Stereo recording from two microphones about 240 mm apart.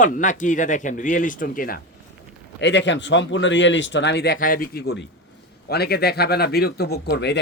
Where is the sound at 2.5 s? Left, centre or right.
Left.